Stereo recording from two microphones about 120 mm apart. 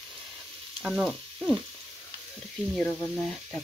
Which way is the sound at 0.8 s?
5° right (ahead or behind).